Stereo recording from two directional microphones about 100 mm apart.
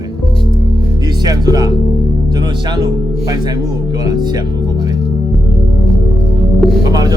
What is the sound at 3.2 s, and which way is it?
Speech, 40° right (ahead or behind).